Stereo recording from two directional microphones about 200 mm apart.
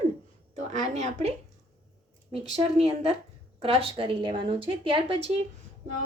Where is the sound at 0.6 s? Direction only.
35° right (ahead or behind).